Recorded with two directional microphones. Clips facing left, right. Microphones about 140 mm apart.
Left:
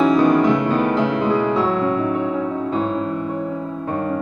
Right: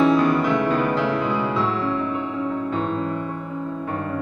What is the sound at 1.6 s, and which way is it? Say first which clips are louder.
Music: left 4 dB; 45° left (ahead or behind).